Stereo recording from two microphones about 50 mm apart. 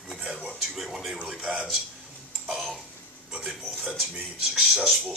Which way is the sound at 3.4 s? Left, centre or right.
Centre.